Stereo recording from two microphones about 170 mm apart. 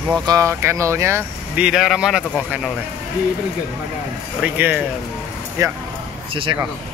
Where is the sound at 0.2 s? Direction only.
20° right (ahead or behind).